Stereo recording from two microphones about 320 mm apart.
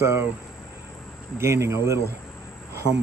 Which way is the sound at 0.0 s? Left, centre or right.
Centre.